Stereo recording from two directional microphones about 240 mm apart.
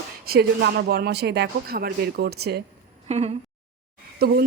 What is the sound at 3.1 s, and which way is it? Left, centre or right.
Speech, right.